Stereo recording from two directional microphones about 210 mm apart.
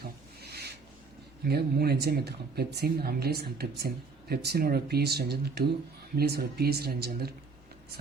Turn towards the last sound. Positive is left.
turn(degrees=-50)  # may be behind; listen again after turning